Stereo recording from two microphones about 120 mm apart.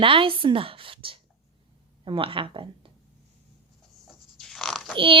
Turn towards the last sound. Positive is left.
turn(degrees=5)  # may be behind; listen again after turning